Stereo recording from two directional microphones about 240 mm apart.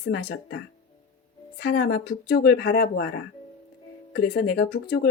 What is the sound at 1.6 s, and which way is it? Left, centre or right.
A woman's voice, left.